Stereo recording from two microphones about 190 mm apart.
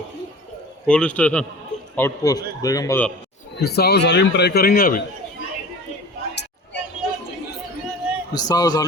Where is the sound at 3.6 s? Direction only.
55° left (ahead or behind).